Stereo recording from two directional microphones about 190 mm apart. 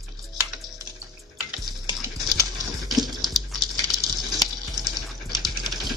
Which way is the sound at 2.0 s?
15° right (ahead or behind).